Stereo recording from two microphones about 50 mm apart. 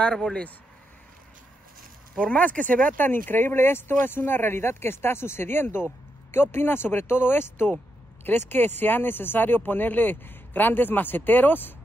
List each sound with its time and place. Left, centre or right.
0.0 s speech: centre
2.2 s speech: left
3.1 s speech: left
7.6 s speech: left